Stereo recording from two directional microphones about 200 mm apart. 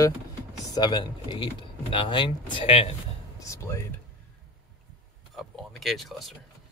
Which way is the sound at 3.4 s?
15° left (ahead or behind).